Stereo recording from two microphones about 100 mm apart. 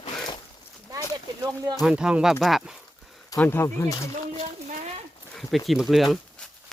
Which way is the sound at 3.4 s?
25° left (ahead or behind).